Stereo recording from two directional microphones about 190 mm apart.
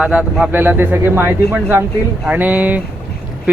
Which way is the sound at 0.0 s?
5° right (ahead or behind).